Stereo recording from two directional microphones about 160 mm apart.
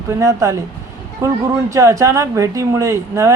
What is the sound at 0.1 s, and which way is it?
Speech, 20° right (ahead or behind).